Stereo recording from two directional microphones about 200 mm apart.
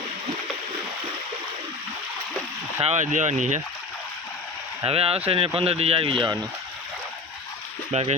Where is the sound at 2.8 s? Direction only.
35° right (ahead or behind).